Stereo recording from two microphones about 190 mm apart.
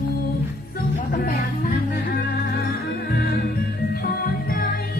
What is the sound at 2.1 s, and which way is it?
Music, 50° left (ahead or behind).